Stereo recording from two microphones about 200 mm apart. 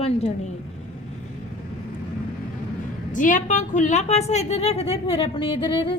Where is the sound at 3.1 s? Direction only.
40° left (ahead or behind).